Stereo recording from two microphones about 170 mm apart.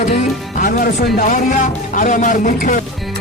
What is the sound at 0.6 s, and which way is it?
A man's voice, 55° left (ahead or behind).